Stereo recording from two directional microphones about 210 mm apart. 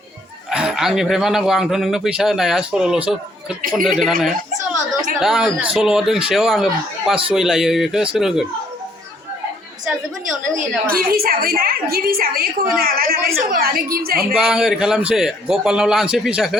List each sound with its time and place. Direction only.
0.5 s speech: centre (ahead or behind)
10.5 s a woman's voice: 40° right (ahead or behind)
14.3 s speech: 5° right (ahead or behind)